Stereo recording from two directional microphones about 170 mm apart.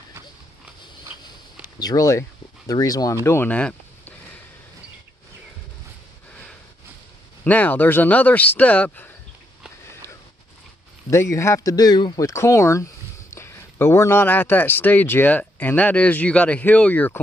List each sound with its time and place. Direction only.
1.8 s speech: 20° left (ahead or behind)
7.4 s speech: 10° left (ahead or behind)
11.1 s speech: 15° left (ahead or behind)